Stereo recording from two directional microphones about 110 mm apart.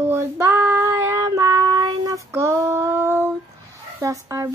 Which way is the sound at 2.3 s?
25° right (ahead or behind).